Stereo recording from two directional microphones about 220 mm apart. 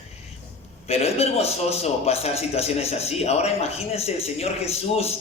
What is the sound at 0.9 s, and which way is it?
A man's voice, 25° left (ahead or behind).